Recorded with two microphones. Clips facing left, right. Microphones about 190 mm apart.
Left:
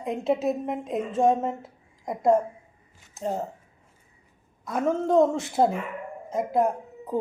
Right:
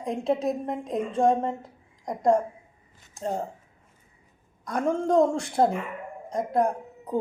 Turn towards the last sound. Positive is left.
turn(degrees=5)  # may be behind; listen again after turning